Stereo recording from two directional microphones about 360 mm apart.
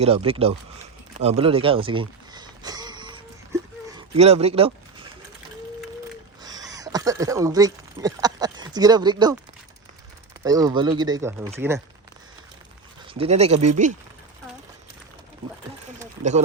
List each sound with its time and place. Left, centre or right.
0.0 s speech: centre
1.2 s a sound: centre
6.4 s speech: centre
10.4 s speech: centre
13.1 s speech: centre